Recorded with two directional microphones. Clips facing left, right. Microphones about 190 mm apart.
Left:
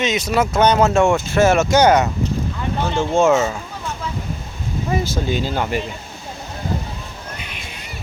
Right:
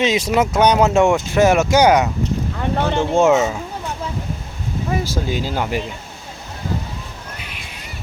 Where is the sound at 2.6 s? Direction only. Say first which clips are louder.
Right 4 dB; 60° right (ahead or behind).